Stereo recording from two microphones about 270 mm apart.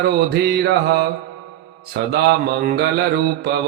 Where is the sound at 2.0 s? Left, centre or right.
Right.